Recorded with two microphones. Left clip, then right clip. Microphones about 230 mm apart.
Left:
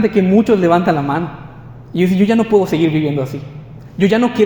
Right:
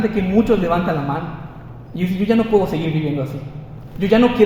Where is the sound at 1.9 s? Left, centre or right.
Left.